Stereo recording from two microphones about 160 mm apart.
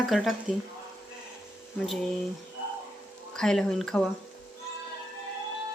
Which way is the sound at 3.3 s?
5° left (ahead or behind).